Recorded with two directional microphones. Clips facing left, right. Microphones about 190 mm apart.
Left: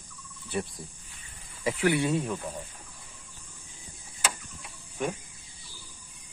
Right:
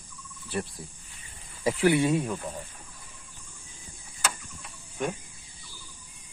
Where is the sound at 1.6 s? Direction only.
30° right (ahead or behind); by 2.5 s 5° right (ahead or behind).